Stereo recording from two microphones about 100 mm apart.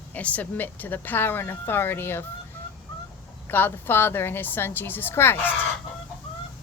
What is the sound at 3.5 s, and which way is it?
Speech, 20° left (ahead or behind).